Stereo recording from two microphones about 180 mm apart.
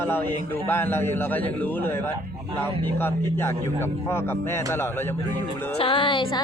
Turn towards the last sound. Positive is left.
turn(degrees=25)  # may be behind; listen again after turning